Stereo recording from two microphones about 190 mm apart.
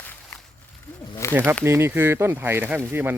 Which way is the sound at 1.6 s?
15° right (ahead or behind).